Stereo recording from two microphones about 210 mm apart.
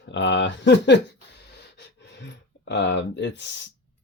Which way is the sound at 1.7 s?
55° left (ahead or behind).